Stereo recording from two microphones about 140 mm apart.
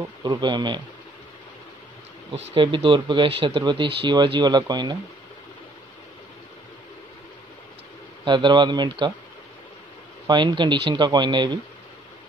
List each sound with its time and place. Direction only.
0.2 s speech: 30° right (ahead or behind)
2.3 s speech: 45° right (ahead or behind)
8.3 s speech: 35° right (ahead or behind)
10.2 s speech: 35° right (ahead or behind)